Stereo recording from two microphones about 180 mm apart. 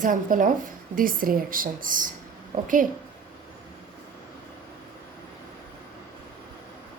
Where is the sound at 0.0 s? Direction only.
50° right (ahead or behind).